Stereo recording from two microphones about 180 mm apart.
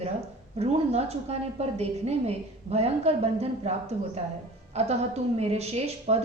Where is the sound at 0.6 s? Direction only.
35° right (ahead or behind).